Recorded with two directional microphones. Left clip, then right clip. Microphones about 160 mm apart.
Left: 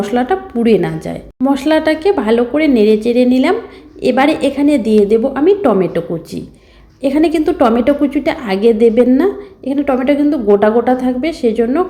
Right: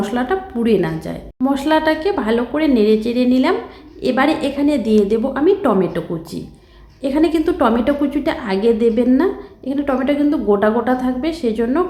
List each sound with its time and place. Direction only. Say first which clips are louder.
0.0 s a woman's voice: left 5 dB; 15° left (ahead or behind)